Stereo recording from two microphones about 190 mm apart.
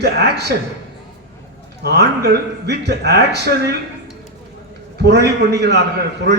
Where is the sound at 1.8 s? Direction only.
55° right (ahead or behind).